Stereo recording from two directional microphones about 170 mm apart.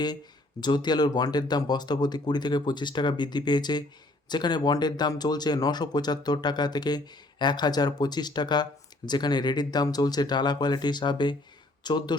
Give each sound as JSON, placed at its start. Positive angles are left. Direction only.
{"t": 0.6, "sound": "speech", "side_deg": 25}